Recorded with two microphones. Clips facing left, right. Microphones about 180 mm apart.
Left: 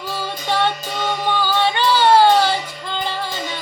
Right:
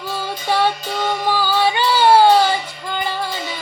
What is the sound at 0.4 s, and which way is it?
Music, 10° right (ahead or behind).